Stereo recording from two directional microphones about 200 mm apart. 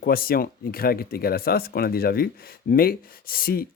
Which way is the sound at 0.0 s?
45° left (ahead or behind).